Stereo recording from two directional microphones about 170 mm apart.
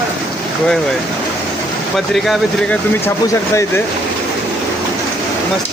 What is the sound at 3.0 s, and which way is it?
Speech, 15° left (ahead or behind).